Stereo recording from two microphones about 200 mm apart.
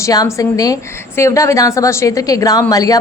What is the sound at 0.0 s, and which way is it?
A woman's voice, 15° left (ahead or behind).